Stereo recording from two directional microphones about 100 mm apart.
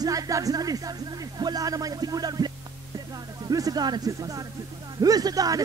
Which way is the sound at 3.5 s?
40° right (ahead or behind).